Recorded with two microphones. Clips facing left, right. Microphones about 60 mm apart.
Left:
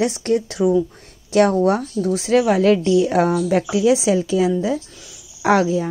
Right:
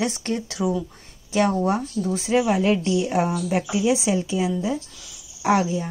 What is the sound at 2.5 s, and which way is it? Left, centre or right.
Speech, left.